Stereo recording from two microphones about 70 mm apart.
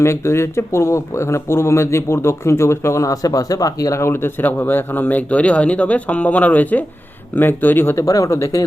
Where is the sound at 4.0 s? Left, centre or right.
Left.